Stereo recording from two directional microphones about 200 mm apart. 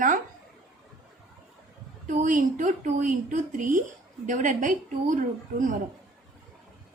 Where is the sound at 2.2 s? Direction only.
40° right (ahead or behind).